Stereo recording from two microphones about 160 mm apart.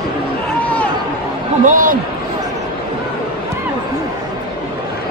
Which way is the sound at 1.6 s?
55° right (ahead or behind).